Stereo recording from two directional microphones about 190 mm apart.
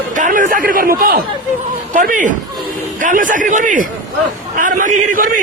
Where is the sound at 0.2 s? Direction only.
45° right (ahead or behind).